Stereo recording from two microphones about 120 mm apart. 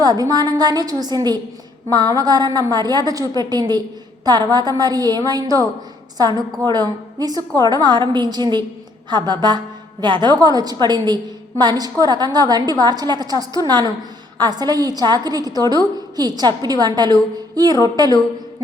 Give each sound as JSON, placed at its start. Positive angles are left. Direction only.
{"t": 0.0, "sound": "a woman's voice", "side_deg": -35}